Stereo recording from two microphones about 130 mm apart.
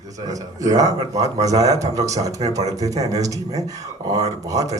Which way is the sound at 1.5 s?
25° right (ahead or behind).